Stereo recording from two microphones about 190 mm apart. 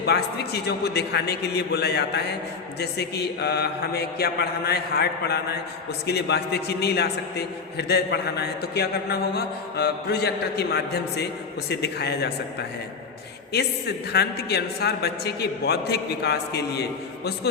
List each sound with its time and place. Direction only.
0.0 s a man's voice: 60° left (ahead or behind)
14.1 s a man's voice: 60° left (ahead or behind)